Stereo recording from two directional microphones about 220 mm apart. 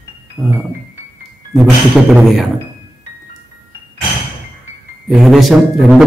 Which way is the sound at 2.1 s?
Centre (ahead or behind).